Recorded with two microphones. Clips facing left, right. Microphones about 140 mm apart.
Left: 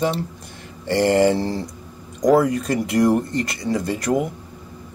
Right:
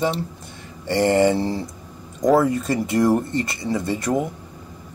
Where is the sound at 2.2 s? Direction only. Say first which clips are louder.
Left 1 dB; centre (ahead or behind).